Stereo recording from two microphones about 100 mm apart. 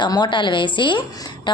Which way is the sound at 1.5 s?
50° left (ahead or behind).